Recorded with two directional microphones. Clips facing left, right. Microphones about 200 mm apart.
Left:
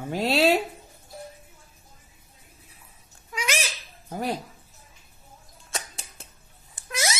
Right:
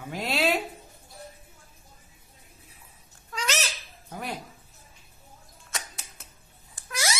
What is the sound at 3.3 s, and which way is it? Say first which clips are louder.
Cat: left 1 dB; 10° left (ahead or behind).